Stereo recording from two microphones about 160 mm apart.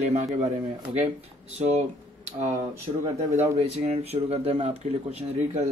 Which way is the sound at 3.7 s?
40° right (ahead or behind).